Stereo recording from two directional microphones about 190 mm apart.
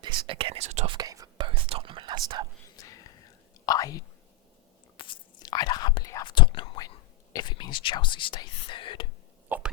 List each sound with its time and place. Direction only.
0.3 s speech: 30° right (ahead or behind)
0.9 s whispering: 20° right (ahead or behind)
2.7 s whispering: 20° left (ahead or behind)
3.7 s speech: 20° left (ahead or behind)
4.9 s whispering: 25° left (ahead or behind)
9.5 s a sound: 10° right (ahead or behind)